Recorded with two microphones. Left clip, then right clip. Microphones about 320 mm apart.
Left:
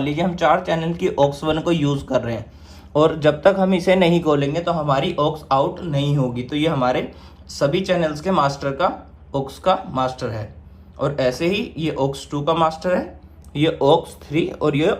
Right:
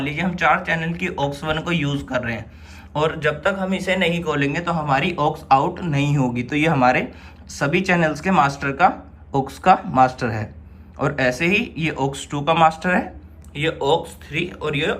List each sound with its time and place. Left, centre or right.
0.0 s a man's voice: centre
13.5 s a man's voice: centre